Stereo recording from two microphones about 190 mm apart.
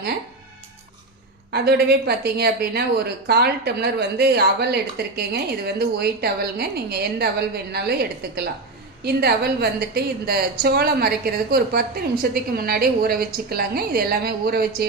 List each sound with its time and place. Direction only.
1.5 s a woman's voice: 60° right (ahead or behind)